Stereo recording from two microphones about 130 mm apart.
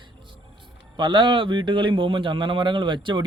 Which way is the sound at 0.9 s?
35° right (ahead or behind).